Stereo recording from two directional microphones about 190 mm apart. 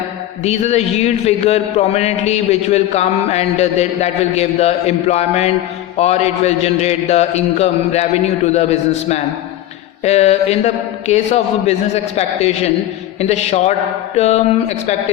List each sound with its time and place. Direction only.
0.4 s a man's voice: 35° left (ahead or behind)